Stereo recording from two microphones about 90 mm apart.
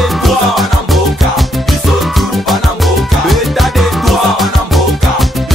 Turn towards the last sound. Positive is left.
turn(degrees=0)  # may be behind; listen again after turning